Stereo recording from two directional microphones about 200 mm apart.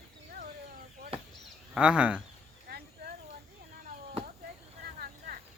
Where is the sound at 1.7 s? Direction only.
5° right (ahead or behind).